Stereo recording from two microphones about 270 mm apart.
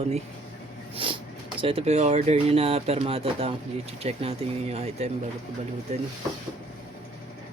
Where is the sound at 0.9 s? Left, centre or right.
Centre.